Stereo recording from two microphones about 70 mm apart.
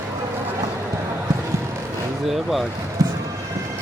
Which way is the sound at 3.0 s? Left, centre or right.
Right.